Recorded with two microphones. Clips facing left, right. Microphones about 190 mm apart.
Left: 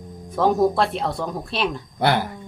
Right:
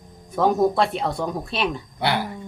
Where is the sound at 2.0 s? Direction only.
45° left (ahead or behind).